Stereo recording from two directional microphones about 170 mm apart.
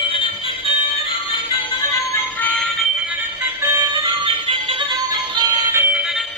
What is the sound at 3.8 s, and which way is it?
Music, 25° right (ahead or behind).